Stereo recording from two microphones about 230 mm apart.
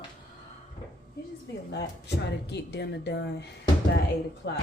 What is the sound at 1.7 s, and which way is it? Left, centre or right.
Speech, left.